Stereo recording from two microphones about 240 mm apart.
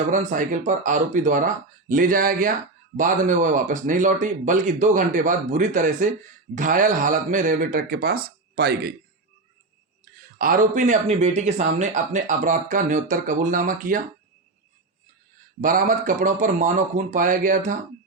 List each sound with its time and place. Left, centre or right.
0.1 s speech: right
10.3 s speech: right
15.6 s speech: right